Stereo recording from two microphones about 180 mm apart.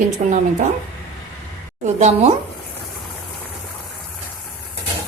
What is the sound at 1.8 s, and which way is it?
Speech, 40° right (ahead or behind).